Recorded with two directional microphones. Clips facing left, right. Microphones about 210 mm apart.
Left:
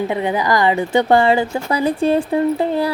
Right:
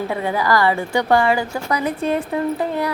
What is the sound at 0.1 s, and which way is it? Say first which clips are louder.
A woman's voice: left 2 dB; 20° left (ahead or behind).